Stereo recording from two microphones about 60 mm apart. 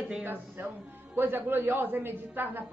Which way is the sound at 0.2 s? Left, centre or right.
Right.